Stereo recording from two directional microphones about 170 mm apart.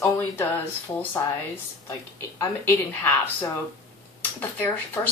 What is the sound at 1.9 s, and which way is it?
Speech, 15° left (ahead or behind).